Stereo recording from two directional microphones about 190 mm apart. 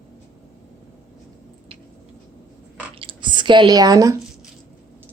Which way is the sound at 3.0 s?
25° right (ahead or behind).